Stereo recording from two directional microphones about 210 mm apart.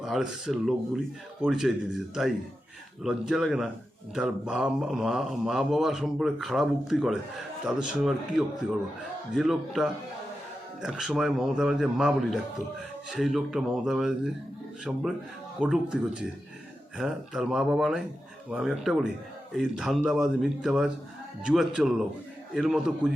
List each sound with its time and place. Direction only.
0.0 s speech: 5° right (ahead or behind)
15.6 s speech: 5° right (ahead or behind)